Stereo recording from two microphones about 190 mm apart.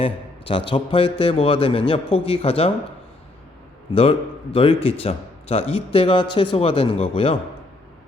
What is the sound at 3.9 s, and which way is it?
Speech, 30° left (ahead or behind).